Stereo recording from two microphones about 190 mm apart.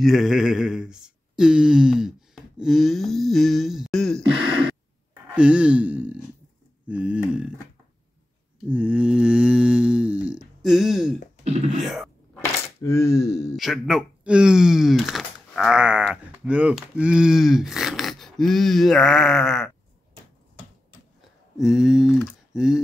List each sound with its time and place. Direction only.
0.0 s speech: centre (ahead or behind)
5.3 s sigh: 5° right (ahead or behind)
8.6 s speech: 5° right (ahead or behind)
11.4 s beatboxing: 35° right (ahead or behind)
11.8 s speech: centre (ahead or behind)
12.4 s coin: 15° left (ahead or behind)
13.6 s speech: centre (ahead or behind)
21.5 s speech: centre (ahead or behind)